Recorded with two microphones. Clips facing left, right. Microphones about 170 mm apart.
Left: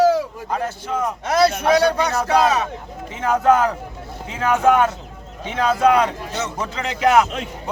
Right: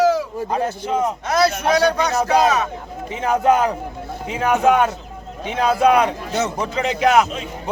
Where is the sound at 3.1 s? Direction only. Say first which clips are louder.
Even; 15° right (ahead or behind).